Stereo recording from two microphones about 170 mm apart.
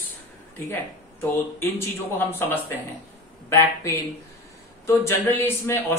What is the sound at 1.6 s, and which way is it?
Speech, 15° left (ahead or behind).